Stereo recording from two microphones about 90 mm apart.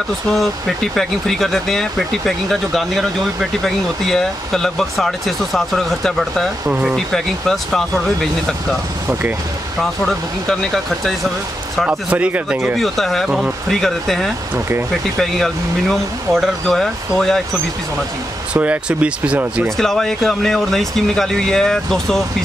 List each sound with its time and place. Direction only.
0.3 s speech: centre (ahead or behind)
6.7 s speech: 15° right (ahead or behind)
7.1 s speech: 5° left (ahead or behind)
10.0 s speech: 5° left (ahead or behind)
11.9 s speech: 20° right (ahead or behind)
12.7 s speech: centre (ahead or behind)
18.5 s speech: 15° right (ahead or behind)
19.8 s speech: 5° left (ahead or behind)